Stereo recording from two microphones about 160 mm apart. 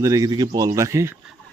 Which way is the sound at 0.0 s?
20° right (ahead or behind).